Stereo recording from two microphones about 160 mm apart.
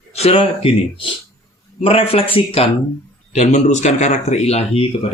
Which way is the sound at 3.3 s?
45° left (ahead or behind).